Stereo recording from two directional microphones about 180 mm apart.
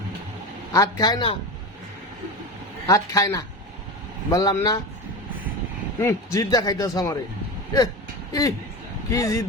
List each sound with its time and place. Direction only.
0.7 s a man's voice: 20° left (ahead or behind)
2.8 s a man's voice: 20° left (ahead or behind)
6.0 s a man's voice: 15° left (ahead or behind)
8.3 s speech: 20° left (ahead or behind)